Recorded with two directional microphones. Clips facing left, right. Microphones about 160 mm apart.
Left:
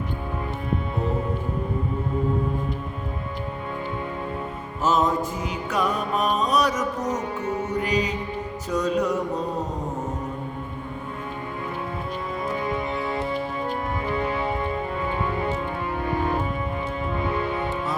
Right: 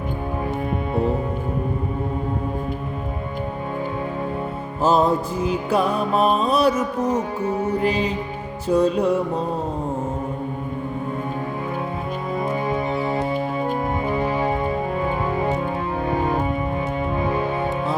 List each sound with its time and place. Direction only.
4.8 s music: 30° right (ahead or behind)
12.6 s music: 25° right (ahead or behind)
14.2 s organ: 30° right (ahead or behind)